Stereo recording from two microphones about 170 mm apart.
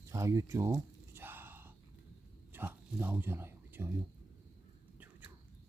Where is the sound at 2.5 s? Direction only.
10° right (ahead or behind).